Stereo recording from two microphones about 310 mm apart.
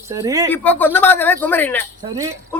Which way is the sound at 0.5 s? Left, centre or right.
Centre.